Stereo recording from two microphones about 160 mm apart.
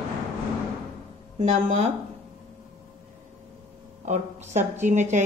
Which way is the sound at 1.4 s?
45° right (ahead or behind).